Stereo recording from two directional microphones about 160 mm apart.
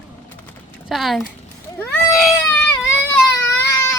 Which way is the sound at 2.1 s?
Centre (ahead or behind).